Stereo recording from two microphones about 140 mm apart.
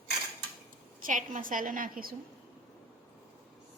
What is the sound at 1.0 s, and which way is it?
A woman's voice, 70° right (ahead or behind).